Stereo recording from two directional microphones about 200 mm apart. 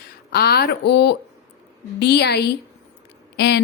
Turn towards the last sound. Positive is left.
turn(degrees=55)  # may be behind; listen again after turning